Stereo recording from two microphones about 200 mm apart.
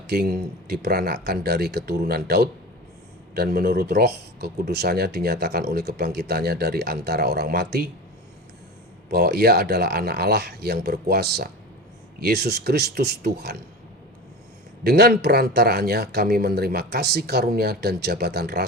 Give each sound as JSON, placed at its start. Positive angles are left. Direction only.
{"t": 0.1, "sound": "speech", "side_deg": -55}
{"t": 9.0, "sound": "speech", "side_deg": -55}
{"t": 14.8, "sound": "speech", "side_deg": -55}